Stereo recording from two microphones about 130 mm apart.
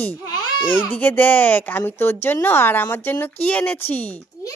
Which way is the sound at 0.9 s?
15° left (ahead or behind).